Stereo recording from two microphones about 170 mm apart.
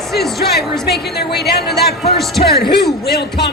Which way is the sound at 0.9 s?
70° left (ahead or behind).